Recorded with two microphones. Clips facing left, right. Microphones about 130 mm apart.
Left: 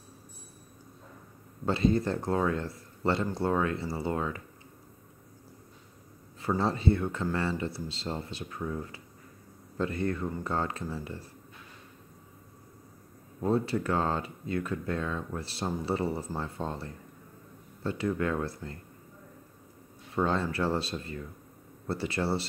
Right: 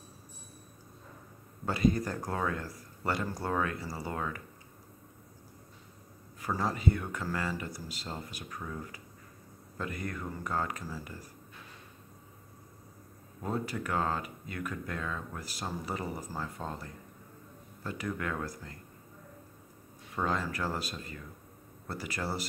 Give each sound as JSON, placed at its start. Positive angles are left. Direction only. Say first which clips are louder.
{"t": 1.7, "sound": "speech", "louder": "left 2 dB", "side_deg": 25}
{"t": 6.4, "sound": "speech", "louder": "left 3 dB", "side_deg": 25}
{"t": 13.4, "sound": "speech", "louder": "left 7 dB", "side_deg": 30}
{"t": 20.2, "sound": "speech", "louder": "left 3 dB", "side_deg": 30}